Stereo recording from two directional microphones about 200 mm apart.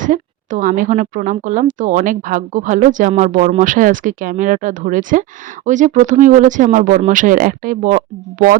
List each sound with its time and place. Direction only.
0.0 s a woman's voice: 40° right (ahead or behind)